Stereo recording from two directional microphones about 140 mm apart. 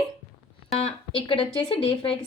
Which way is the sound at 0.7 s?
45° left (ahead or behind).